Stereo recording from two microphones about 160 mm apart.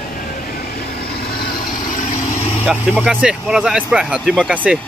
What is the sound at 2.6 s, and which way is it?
Speech, 5° right (ahead or behind).